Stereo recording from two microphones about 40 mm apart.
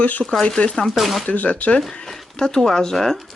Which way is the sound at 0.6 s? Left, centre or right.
Left.